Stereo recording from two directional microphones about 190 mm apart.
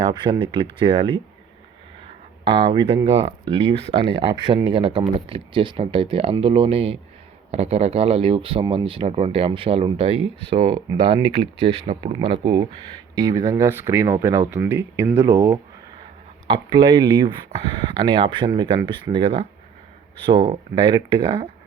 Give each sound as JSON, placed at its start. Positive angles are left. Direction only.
{"t": 0.0, "sound": "speech", "side_deg": -25}
{"t": 2.4, "sound": "speech", "side_deg": -30}
{"t": 16.6, "sound": "speech", "side_deg": -25}